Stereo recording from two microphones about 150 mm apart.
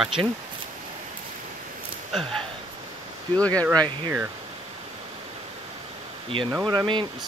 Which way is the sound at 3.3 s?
10° left (ahead or behind).